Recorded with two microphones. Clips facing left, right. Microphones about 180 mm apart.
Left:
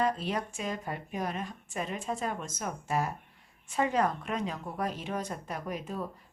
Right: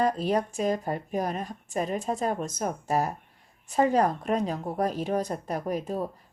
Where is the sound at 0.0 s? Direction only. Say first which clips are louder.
Right 5 dB; 40° right (ahead or behind).